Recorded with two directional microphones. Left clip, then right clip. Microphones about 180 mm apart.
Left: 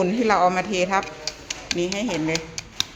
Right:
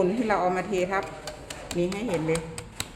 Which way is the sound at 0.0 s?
20° left (ahead or behind).